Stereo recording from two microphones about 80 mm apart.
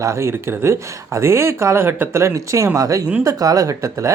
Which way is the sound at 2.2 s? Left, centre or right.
Right.